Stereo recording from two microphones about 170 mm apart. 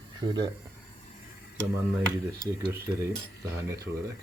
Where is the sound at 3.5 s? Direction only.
15° right (ahead or behind).